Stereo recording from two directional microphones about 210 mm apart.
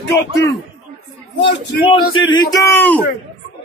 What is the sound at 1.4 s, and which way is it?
Speech, 60° left (ahead or behind).